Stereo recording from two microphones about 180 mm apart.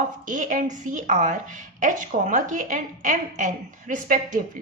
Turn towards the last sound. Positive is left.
turn(degrees=-45)  # may be behind; listen again after turning